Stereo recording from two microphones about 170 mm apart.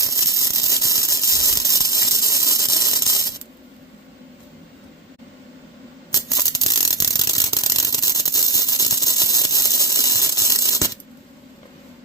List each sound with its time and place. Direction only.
0.0 s a sound: 20° left (ahead or behind)
2.7 s mechanisms: 20° left (ahead or behind)
6.1 s mechanisms: 20° left (ahead or behind)